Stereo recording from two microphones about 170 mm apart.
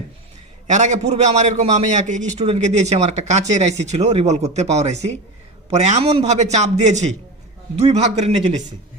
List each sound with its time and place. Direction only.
0.7 s a man's voice: 45° right (ahead or behind)